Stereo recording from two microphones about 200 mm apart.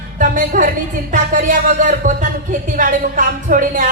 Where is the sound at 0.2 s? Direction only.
40° right (ahead or behind).